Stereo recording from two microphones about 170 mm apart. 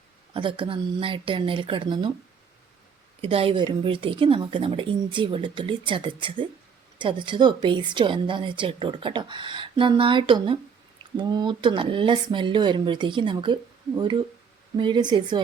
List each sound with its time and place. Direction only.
0.3 s a woman's voice: 30° right (ahead or behind)
3.2 s a woman's voice: 35° right (ahead or behind)